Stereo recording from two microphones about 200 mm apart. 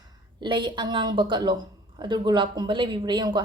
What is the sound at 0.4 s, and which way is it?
A woman's voice, 25° right (ahead or behind).